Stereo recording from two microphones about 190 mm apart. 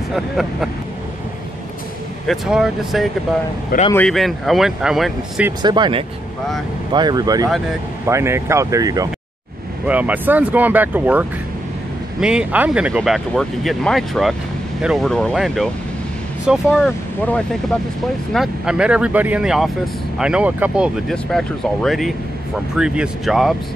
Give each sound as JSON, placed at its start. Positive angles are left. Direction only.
{"t": 0.1, "sound": "speech", "side_deg": 0}
{"t": 2.2, "sound": "speech", "side_deg": 0}
{"t": 5.6, "sound": "speech", "side_deg": -20}
{"t": 9.8, "sound": "speech", "side_deg": -10}